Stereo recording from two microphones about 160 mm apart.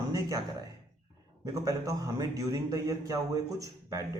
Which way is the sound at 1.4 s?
20° right (ahead or behind).